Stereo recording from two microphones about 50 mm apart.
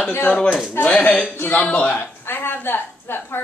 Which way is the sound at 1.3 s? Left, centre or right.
Left.